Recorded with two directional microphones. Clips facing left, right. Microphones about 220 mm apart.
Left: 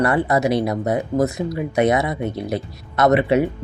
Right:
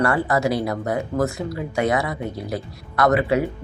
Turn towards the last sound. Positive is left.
turn(degrees=20)  # may be behind; listen again after turning